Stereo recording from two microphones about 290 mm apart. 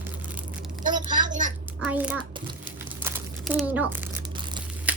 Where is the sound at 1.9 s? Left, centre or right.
Centre.